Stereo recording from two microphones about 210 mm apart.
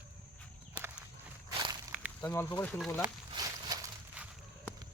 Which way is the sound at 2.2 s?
10° left (ahead or behind).